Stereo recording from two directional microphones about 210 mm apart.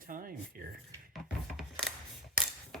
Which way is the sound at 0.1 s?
40° right (ahead or behind).